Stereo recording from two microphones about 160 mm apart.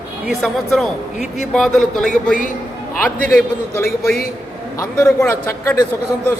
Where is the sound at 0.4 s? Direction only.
Centre (ahead or behind).